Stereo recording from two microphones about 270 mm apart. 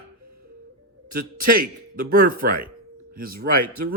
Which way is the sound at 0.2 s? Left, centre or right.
Right.